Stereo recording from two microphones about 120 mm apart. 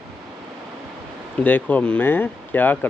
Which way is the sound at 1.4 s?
15° left (ahead or behind).